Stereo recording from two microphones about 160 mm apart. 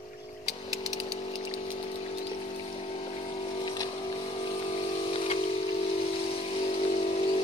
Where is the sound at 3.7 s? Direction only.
25° left (ahead or behind).